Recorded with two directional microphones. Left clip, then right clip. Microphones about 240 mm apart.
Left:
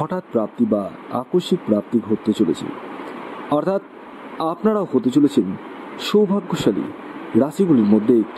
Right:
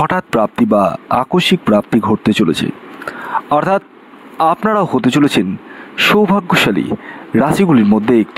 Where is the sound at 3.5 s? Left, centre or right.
Right.